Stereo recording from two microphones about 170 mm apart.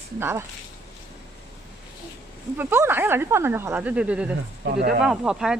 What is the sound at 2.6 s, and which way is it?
Speech, 15° right (ahead or behind).